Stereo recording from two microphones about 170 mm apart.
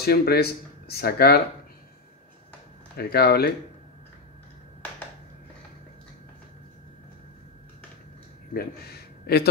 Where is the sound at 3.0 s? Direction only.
65° left (ahead or behind).